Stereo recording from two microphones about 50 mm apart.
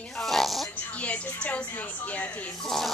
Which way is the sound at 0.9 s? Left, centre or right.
Left.